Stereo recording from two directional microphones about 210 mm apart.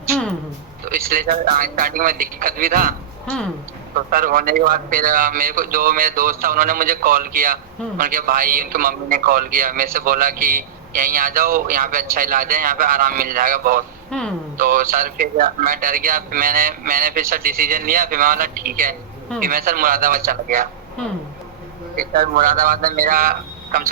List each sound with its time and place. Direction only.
0.9 s a man's voice: 45° right (ahead or behind)
4.1 s a man's voice: 40° right (ahead or behind)
14.1 s speech: 5° left (ahead or behind)
14.6 s a man's voice: 40° right (ahead or behind)
21.9 s a man's voice: 40° right (ahead or behind)